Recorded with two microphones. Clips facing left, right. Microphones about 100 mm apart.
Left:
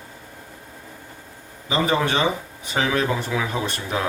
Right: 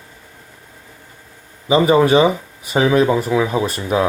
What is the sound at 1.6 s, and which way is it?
Speech, 15° right (ahead or behind).